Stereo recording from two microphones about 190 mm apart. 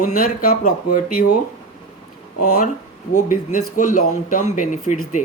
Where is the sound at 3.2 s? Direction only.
45° left (ahead or behind).